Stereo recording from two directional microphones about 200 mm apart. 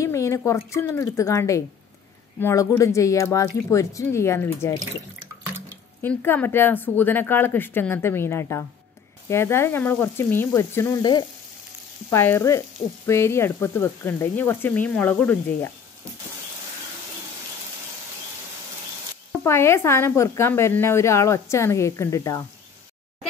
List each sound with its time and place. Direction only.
0.0 s speech: 15° left (ahead or behind)
2.4 s frying: 15° left (ahead or behind)
6.0 s frying: 10° left (ahead or behind)
19.4 s frying: 15° left (ahead or behind)